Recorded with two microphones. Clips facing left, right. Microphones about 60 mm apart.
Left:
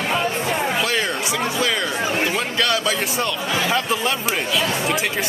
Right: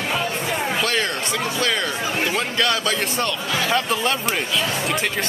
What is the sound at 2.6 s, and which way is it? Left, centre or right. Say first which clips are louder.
Speech: left 1 dB; centre.